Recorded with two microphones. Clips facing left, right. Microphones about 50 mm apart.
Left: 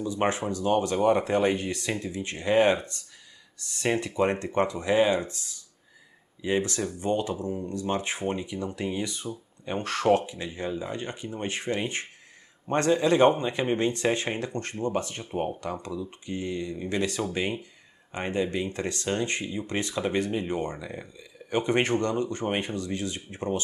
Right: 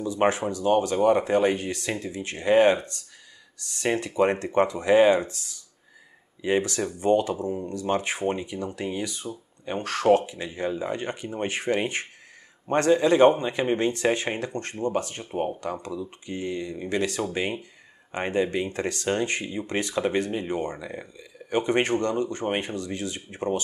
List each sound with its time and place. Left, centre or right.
0.1 s speech: centre
4.1 s speech: centre
6.4 s speech: centre
9.9 s speech: centre